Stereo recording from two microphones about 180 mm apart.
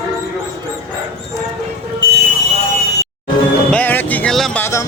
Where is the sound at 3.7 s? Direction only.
10° left (ahead or behind).